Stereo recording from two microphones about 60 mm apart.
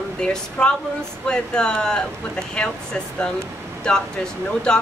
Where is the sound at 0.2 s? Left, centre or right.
Centre.